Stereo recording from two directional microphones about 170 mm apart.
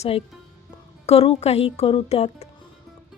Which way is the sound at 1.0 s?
35° left (ahead or behind).